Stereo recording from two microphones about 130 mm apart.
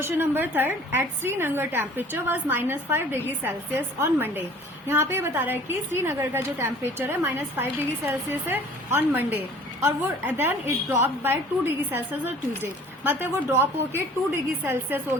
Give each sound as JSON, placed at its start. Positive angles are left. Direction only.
{"t": 0.0, "sound": "a woman's voice", "side_deg": -15}
{"t": 13.1, "sound": "a woman's voice", "side_deg": -15}